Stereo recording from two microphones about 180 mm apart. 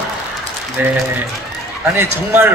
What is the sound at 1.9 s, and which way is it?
Speech, 10° right (ahead or behind).